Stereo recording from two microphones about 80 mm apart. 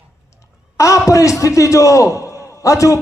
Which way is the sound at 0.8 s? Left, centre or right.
Left.